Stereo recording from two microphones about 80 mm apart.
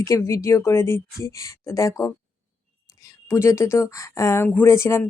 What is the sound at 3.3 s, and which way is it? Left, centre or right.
Speech, left.